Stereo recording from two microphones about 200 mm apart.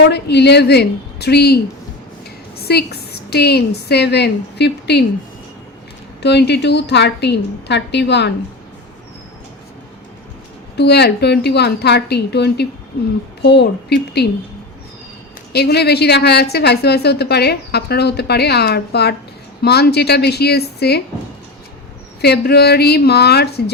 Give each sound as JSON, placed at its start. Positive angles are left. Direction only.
{"t": 0.1, "sound": "a woman's voice", "side_deg": 55}
{"t": 2.6, "sound": "a woman's voice", "side_deg": 55}
{"t": 6.2, "sound": "a woman's voice", "side_deg": 55}
{"t": 10.8, "sound": "a woman's voice", "side_deg": 55}
{"t": 15.5, "sound": "a woman's voice", "side_deg": 55}
{"t": 22.2, "sound": "a woman's voice", "side_deg": 55}